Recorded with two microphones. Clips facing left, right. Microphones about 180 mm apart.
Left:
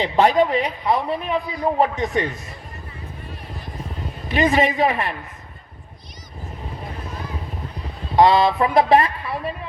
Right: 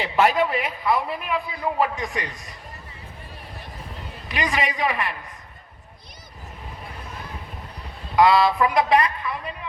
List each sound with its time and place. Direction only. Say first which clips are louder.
0.0 s a man's voice: left 4 dB; 35° left (ahead or behind)
4.3 s a woman's voice: left 8 dB; 30° left (ahead or behind)
8.1 s a man's voice: left 2 dB; 25° left (ahead or behind)